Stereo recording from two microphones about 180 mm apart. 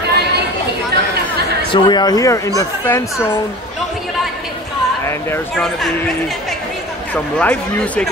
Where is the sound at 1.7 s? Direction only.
25° left (ahead or behind).